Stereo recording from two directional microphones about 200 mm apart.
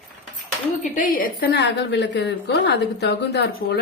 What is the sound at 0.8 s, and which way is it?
A woman's voice, 45° left (ahead or behind).